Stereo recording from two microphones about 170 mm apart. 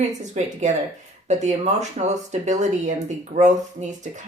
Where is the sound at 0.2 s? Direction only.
45° right (ahead or behind).